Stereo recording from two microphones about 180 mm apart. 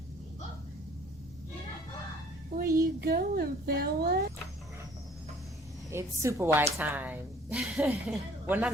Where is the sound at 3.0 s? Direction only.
55° right (ahead or behind).